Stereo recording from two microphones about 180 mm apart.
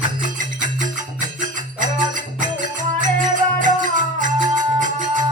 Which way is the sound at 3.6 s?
45° right (ahead or behind).